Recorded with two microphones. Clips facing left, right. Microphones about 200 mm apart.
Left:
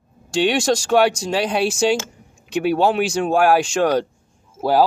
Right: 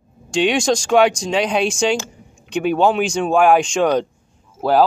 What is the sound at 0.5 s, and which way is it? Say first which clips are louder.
Speech: right 1 dB; 5° left (ahead or behind).